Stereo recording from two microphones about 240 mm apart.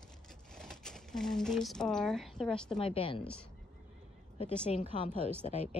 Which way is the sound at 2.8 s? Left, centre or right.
Left.